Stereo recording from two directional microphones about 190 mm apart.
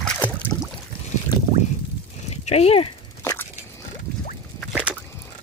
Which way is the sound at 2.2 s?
35° left (ahead or behind).